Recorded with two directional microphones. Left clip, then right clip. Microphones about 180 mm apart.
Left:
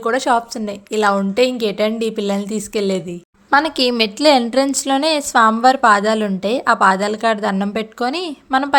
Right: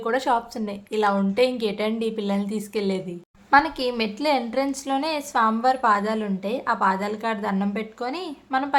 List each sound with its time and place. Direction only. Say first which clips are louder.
0.0 s a woman's voice: left 6 dB; 25° left (ahead or behind)
3.5 s a woman's voice: left 4 dB; 40° left (ahead or behind)